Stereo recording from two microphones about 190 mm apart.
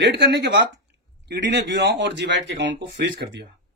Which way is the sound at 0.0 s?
60° right (ahead or behind).